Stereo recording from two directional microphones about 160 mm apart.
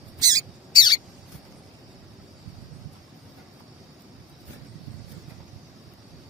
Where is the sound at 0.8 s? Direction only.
25° left (ahead or behind).